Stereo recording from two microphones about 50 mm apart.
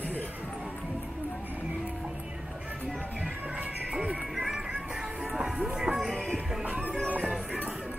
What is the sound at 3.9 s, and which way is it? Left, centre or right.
Music, right.